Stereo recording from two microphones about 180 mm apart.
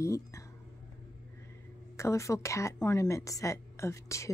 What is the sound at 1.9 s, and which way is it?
A woman's voice, 15° left (ahead or behind).